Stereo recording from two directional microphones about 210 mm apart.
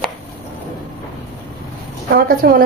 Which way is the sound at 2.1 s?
45° right (ahead or behind).